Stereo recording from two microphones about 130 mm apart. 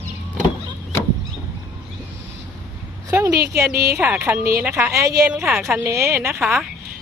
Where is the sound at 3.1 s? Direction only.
20° right (ahead or behind).